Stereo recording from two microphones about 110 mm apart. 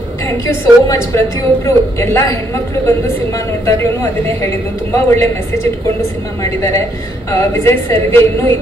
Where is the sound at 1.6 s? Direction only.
25° left (ahead or behind).